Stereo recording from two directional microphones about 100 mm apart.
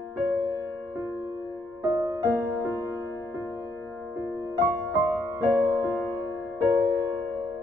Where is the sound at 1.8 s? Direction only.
40° right (ahead or behind).